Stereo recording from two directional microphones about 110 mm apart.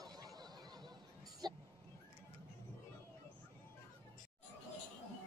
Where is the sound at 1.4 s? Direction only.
40° right (ahead or behind).